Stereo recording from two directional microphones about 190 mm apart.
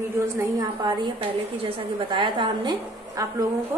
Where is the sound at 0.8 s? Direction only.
25° right (ahead or behind).